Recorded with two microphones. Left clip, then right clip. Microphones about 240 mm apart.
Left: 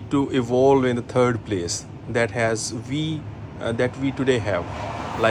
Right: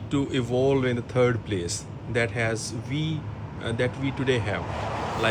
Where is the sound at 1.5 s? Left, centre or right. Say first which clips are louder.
Left 4 dB; centre.